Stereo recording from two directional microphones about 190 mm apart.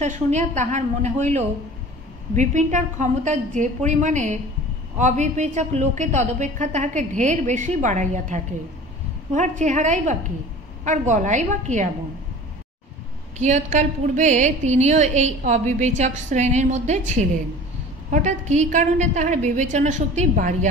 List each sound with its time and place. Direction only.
0.0 s a woman's voice: 40° right (ahead or behind)
13.4 s a woman's voice: 40° right (ahead or behind)